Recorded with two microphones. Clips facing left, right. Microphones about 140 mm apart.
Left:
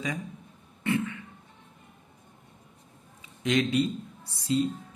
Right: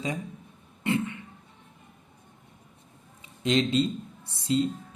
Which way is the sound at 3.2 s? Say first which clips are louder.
Right 1 dB; 25° right (ahead or behind).